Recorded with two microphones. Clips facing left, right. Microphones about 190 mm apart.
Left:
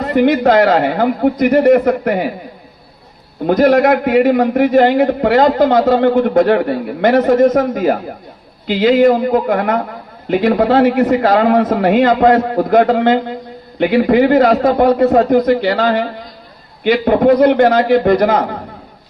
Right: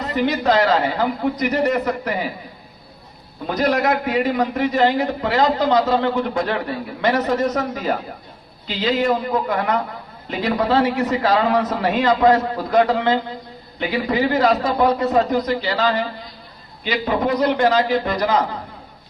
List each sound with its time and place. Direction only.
0.0 s a man's voice: 55° left (ahead or behind)
3.4 s a man's voice: 55° left (ahead or behind)